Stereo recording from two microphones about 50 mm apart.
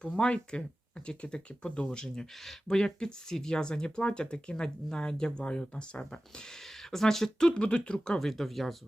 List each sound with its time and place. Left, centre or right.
0.2 s speech: centre